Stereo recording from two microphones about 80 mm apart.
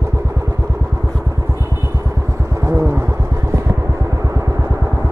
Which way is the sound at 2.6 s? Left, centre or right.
Right.